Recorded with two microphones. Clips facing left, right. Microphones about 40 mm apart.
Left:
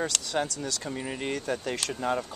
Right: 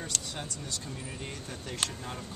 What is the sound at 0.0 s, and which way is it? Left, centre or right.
Speech, left.